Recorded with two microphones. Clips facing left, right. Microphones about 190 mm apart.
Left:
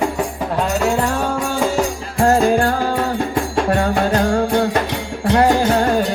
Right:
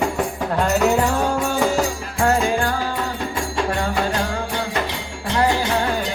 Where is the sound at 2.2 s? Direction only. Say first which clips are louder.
Left 5 dB; 40° left (ahead or behind).